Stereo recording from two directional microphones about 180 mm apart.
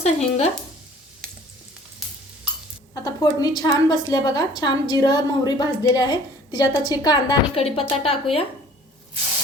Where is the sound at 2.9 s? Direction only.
20° left (ahead or behind).